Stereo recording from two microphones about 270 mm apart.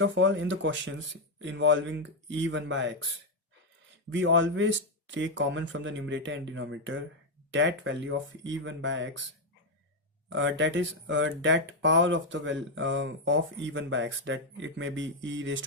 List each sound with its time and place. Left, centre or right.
0.0 s speech: right
4.1 s speech: right
10.2 s speech: right